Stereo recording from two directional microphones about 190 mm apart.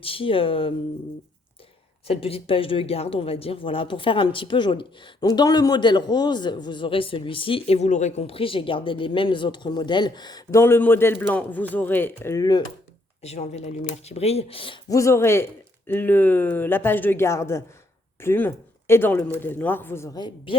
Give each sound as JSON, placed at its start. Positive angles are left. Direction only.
{"t": 0.0, "sound": "speech", "side_deg": 30}
{"t": 2.0, "sound": "speech", "side_deg": 30}
{"t": 13.2, "sound": "speech", "side_deg": 35}
{"t": 14.9, "sound": "speech", "side_deg": 15}